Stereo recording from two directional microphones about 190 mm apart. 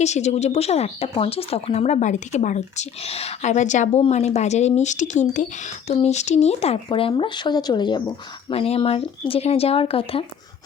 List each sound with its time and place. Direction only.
0.0 s speech: 35° left (ahead or behind)